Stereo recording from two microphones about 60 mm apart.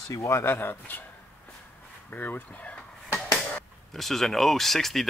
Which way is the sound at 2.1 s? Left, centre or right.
Left.